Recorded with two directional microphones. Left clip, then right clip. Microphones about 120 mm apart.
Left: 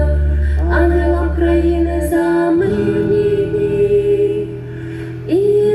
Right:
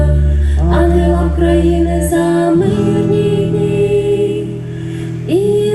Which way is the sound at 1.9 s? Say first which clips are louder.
Right 2 dB; 15° right (ahead or behind).